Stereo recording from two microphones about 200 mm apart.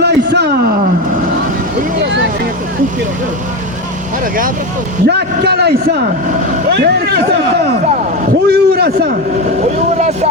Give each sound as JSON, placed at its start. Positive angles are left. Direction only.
{"t": 0.0, "sound": "speech", "side_deg": -55}
{"t": 5.0, "sound": "a man's voice", "side_deg": -55}
{"t": 8.4, "sound": "a man's voice", "side_deg": -55}
{"t": 9.7, "sound": "speech", "side_deg": -35}